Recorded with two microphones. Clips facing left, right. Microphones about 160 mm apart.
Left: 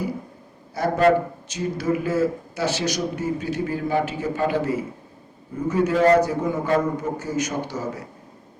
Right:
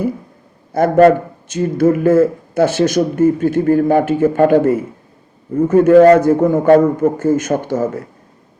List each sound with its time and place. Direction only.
0.7 s a man's voice: 50° right (ahead or behind)